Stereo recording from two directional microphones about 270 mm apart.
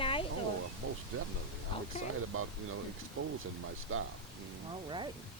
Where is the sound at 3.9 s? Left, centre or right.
Right.